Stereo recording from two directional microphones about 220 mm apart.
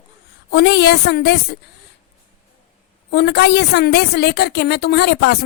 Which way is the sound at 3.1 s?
50° left (ahead or behind).